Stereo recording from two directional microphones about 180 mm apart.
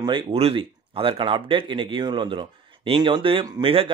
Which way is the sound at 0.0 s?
30° right (ahead or behind).